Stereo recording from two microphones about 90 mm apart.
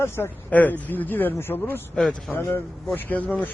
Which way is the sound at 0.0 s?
20° left (ahead or behind).